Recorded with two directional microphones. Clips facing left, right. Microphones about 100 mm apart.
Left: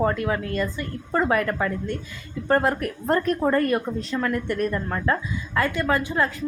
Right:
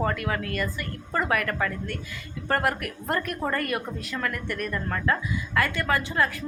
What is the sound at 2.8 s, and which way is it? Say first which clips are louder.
A woman's voice: left 6 dB; 30° left (ahead or behind).